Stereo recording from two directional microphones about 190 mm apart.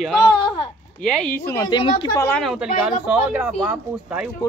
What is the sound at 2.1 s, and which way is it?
Speech, 15° left (ahead or behind).